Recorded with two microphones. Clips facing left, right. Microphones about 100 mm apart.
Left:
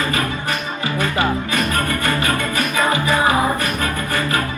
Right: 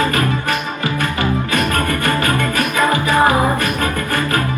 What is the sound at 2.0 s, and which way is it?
Music, 50° right (ahead or behind).